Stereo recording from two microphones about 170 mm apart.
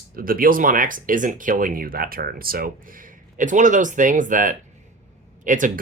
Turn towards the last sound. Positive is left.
turn(degrees=-50)  # may be behind; listen again after turning